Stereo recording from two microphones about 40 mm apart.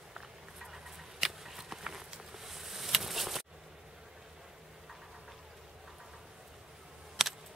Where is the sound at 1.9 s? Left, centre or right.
Centre.